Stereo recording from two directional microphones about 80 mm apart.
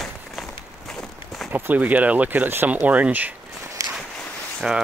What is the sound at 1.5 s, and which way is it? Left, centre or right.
Speech, right.